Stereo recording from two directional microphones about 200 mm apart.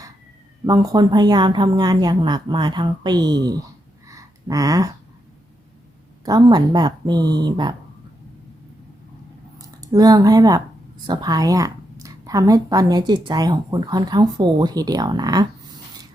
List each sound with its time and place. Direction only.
0.6 s speech: 20° right (ahead or behind)
6.2 s speech: 20° right (ahead or behind)
9.6 s a woman's voice: 15° right (ahead or behind)